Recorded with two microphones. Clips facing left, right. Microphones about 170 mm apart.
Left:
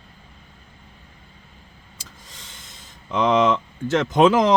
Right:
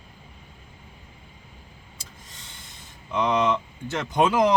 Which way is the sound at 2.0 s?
90° left.